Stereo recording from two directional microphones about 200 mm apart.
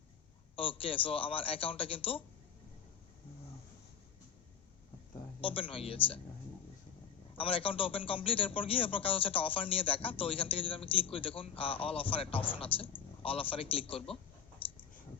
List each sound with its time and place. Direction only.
0.5 s a man's voice: 25° left (ahead or behind)
5.4 s a man's voice: 25° left (ahead or behind)
7.3 s a man's voice: 25° left (ahead or behind)